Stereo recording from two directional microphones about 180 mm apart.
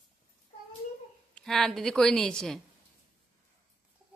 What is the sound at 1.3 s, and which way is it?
A woman's voice, centre (ahead or behind).